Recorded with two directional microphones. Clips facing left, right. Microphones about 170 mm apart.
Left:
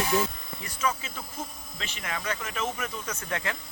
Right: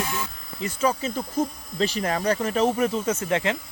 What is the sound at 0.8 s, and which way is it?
Speech, 35° right (ahead or behind).